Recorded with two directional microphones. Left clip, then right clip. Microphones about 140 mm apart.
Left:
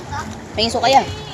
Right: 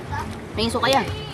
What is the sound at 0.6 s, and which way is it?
Speech, 35° right (ahead or behind).